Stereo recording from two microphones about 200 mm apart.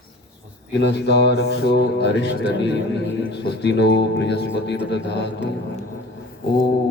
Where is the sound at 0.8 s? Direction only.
60° left (ahead or behind).